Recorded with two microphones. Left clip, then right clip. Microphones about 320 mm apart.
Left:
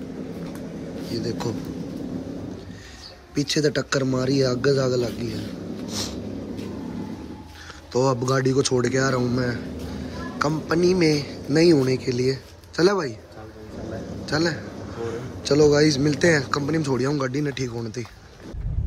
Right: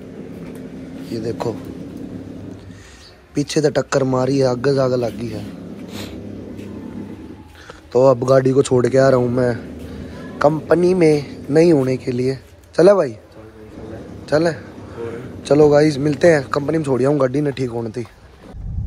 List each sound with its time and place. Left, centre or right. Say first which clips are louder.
3.3 s a man's voice: right 5 dB; centre
7.9 s a man's voice: right 9 dB; centre
14.2 s a man's voice: right 7 dB; centre